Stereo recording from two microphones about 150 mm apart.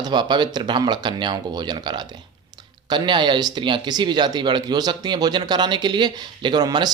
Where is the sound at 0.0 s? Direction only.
30° right (ahead or behind).